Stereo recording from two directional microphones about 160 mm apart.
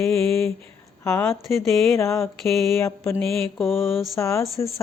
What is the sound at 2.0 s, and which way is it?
Speech, 15° left (ahead or behind).